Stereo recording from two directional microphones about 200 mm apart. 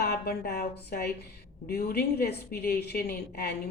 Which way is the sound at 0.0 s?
55° left (ahead or behind).